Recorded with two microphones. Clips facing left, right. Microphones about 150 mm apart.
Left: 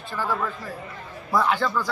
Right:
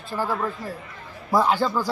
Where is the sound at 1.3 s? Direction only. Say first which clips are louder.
Right 2 dB; 30° right (ahead or behind).